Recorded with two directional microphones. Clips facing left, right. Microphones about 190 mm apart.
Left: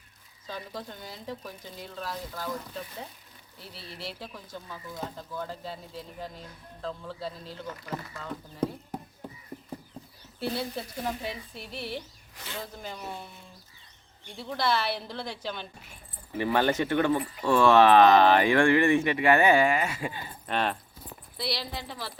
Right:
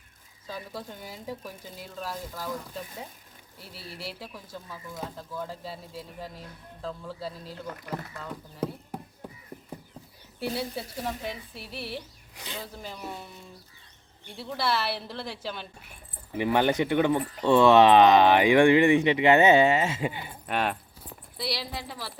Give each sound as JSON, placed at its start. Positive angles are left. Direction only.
{"t": 0.4, "sound": "speech", "side_deg": -5}
{"t": 3.6, "sound": "speech", "side_deg": -5}
{"t": 10.4, "sound": "speech", "side_deg": -10}
{"t": 12.4, "sound": "speech", "side_deg": -15}
{"t": 12.6, "sound": "speech", "side_deg": 0}
{"t": 14.3, "sound": "speech", "side_deg": -5}
{"t": 16.4, "sound": "speech", "side_deg": -15}